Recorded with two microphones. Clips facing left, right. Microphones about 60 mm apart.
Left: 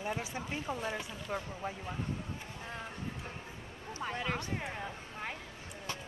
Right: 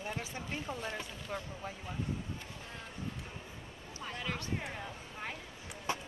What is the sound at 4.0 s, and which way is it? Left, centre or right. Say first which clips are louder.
Speech: left 4 dB; centre.